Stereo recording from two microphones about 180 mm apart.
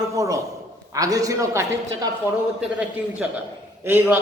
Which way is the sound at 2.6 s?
5° right (ahead or behind).